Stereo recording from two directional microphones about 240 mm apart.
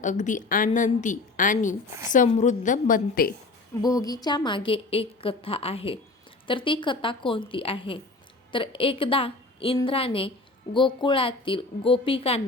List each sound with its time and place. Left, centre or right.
0.0 s a woman's voice: left
3.8 s a woman's voice: centre